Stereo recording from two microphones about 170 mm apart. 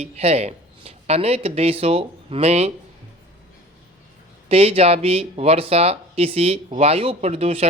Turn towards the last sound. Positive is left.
turn(degrees=-35)  # may be behind; listen again after turning